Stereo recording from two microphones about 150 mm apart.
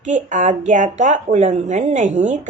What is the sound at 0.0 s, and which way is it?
Speech, 55° right (ahead or behind).